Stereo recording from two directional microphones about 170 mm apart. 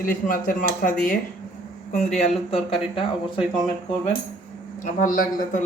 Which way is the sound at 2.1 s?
35° left (ahead or behind).